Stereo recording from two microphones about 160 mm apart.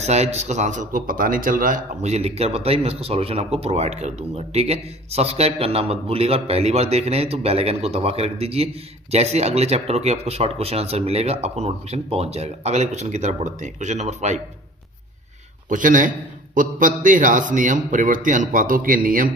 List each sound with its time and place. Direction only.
0.0 s speech: 45° right (ahead or behind)
15.7 s a man's voice: 55° right (ahead or behind)